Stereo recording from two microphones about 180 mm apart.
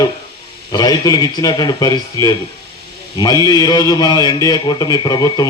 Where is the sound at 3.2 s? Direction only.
20° left (ahead or behind).